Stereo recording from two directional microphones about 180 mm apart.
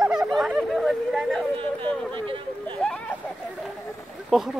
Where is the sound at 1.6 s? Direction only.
30° right (ahead or behind).